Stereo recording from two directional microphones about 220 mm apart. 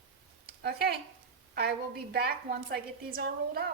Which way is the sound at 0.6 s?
45° right (ahead or behind).